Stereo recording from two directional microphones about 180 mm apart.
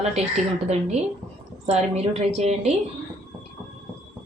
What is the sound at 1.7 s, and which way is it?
A woman's voice, 35° right (ahead or behind).